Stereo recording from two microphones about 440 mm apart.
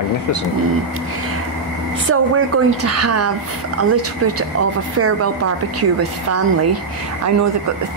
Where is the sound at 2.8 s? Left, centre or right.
Right.